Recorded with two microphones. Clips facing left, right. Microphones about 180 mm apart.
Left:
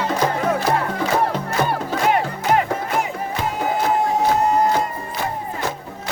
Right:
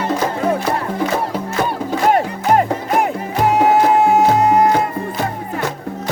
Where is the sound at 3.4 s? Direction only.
75° right (ahead or behind).